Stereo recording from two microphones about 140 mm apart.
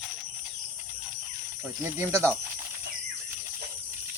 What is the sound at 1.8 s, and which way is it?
Speech, 20° right (ahead or behind).